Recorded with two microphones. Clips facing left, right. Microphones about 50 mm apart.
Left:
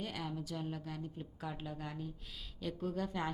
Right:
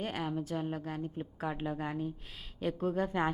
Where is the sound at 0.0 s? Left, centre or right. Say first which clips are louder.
Right 6 dB; right.